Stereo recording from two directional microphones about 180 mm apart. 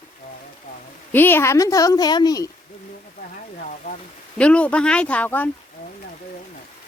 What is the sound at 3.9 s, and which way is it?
Rain on surface, 50° left (ahead or behind).